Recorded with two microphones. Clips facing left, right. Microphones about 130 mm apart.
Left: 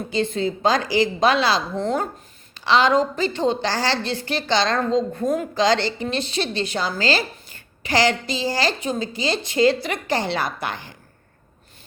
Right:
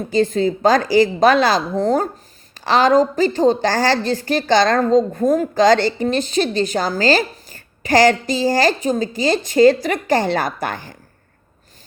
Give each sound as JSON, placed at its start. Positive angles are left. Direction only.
{"t": 0.1, "sound": "a woman's voice", "side_deg": -45}